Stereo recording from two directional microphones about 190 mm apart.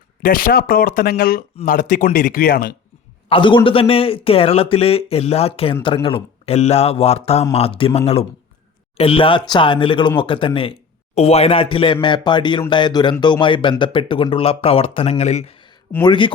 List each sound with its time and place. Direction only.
0.2 s speech: 50° left (ahead or behind)
3.2 s a man's voice: 25° left (ahead or behind)